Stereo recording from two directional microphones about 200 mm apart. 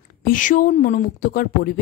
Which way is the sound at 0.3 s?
40° left (ahead or behind).